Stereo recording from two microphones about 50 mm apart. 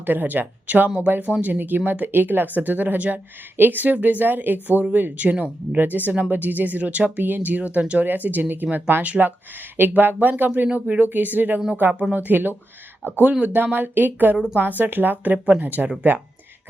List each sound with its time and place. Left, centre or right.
0.0 s speech: right